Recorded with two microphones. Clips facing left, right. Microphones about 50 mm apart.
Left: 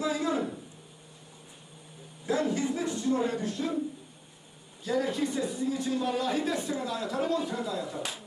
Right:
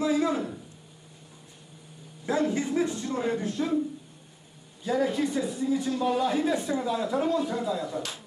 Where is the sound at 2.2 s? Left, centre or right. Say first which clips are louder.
Right 2 dB; right.